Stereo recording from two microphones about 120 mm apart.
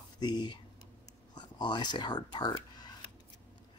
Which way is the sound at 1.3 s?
35° left (ahead or behind).